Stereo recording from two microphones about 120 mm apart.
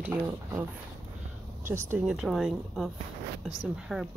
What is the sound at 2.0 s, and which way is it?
Speech, 5° right (ahead or behind).